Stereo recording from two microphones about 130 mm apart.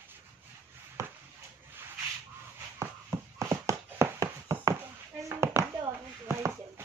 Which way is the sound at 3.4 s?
25° right (ahead or behind).